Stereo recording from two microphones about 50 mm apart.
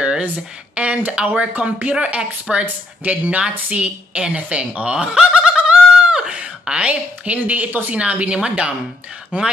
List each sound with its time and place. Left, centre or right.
0.7 s speech: right
5.6 s fowl: right
6.9 s a woman's voice: right